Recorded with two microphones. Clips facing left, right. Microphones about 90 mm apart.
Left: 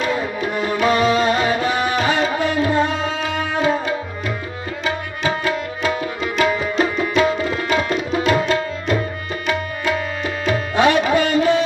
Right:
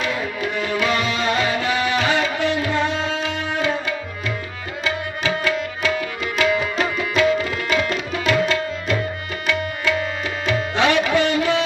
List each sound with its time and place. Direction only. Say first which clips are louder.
0.0 s music: left 3 dB; 40° left (ahead or behind)
4.8 s tabla: left 1 dB; 35° left (ahead or behind)
6.4 s music: left 2 dB; 35° left (ahead or behind)
7.2 s tabla: even; 35° left (ahead or behind)